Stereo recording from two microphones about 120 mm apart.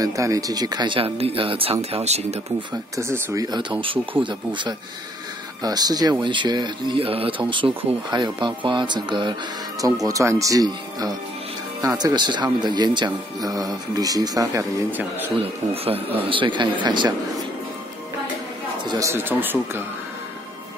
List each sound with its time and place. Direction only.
0.0 s speech: 30° right (ahead or behind); by 2.4 s 60° right (ahead or behind)
3.0 s speech: 25° right (ahead or behind)
3.8 s speech: 45° right (ahead or behind); by 14.7 s 30° right (ahead or behind)
14.9 s speech: 15° right (ahead or behind)
15.7 s speech: 55° right (ahead or behind)
16.3 s speech: 45° right (ahead or behind)
18.9 s speech: 30° right (ahead or behind)
19.1 s speech: 15° right (ahead or behind)